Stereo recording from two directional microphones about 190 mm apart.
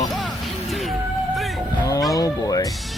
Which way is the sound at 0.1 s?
Centre (ahead or behind).